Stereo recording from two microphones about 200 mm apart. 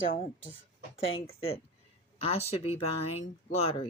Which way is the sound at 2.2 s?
30° left (ahead or behind).